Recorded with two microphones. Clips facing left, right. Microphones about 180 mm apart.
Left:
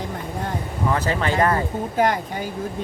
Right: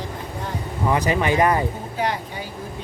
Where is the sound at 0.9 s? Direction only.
15° right (ahead or behind).